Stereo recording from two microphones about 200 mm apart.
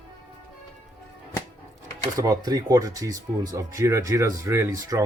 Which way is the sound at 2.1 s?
15° right (ahead or behind).